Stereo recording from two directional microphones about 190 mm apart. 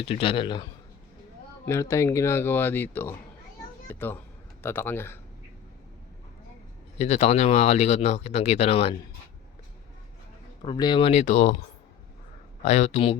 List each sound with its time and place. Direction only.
0.1 s speech: 30° left (ahead or behind); by 5.2 s 10° left (ahead or behind)
7.0 s speech: 35° left (ahead or behind)
10.6 s speech: 25° left (ahead or behind); by 11.5 s 40° left (ahead or behind)
12.6 s speech: 35° left (ahead or behind)